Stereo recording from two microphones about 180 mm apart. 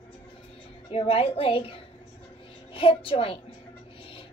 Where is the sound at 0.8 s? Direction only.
30° left (ahead or behind).